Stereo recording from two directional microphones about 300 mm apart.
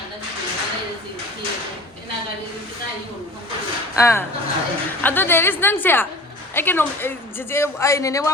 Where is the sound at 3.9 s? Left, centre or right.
Centre.